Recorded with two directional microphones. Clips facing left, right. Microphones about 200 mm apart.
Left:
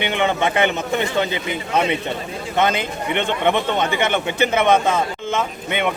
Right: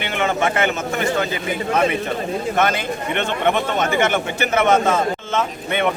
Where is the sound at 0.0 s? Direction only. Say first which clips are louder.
Left 1 dB; 20° left (ahead or behind).